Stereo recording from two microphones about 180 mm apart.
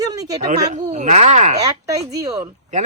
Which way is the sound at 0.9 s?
40° right (ahead or behind).